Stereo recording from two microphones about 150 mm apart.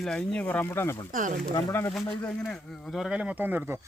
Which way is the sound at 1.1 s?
60° right (ahead or behind).